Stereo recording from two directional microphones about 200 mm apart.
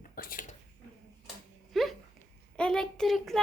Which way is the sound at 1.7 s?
Centre (ahead or behind).